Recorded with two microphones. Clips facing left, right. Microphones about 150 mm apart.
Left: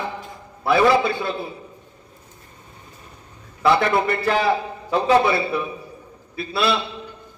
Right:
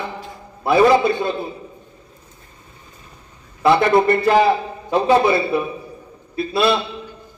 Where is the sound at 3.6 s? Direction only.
25° right (ahead or behind).